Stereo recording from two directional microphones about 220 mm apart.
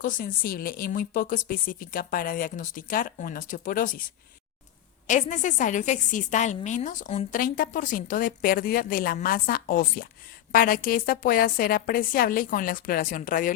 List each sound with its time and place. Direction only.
0.0 s a woman's voice: 40° left (ahead or behind)
5.0 s a woman's voice: 35° left (ahead or behind)